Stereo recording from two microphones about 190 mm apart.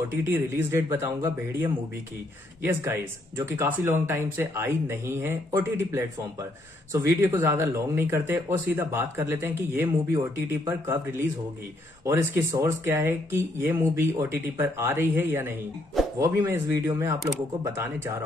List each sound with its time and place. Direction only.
0.1 s speech: 10° right (ahead or behind)